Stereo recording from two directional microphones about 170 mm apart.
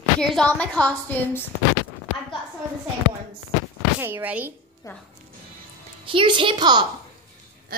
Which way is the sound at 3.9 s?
10° right (ahead or behind).